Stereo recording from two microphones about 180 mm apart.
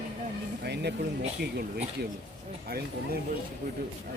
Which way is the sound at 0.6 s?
65° right (ahead or behind).